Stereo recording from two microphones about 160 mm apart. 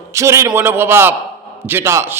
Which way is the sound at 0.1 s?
20° right (ahead or behind).